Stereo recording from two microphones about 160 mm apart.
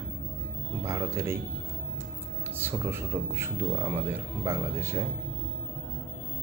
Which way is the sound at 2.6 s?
15° right (ahead or behind).